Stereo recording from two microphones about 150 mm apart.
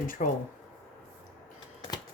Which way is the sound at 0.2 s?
65° left (ahead or behind).